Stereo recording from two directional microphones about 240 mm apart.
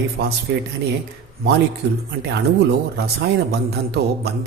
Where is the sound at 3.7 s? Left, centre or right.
Right.